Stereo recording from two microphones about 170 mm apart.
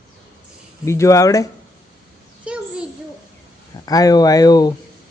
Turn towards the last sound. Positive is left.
turn(degrees=25)  # may be behind; listen again after turning